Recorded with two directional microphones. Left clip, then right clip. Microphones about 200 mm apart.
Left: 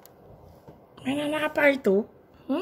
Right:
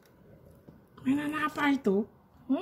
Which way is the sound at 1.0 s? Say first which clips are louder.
Left 3 dB; 20° left (ahead or behind).